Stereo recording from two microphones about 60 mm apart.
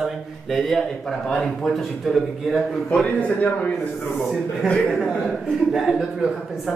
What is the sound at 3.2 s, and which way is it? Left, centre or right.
A man's voice, left.